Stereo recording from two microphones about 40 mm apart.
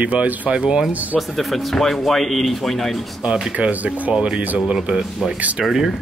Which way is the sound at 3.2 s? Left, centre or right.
Centre.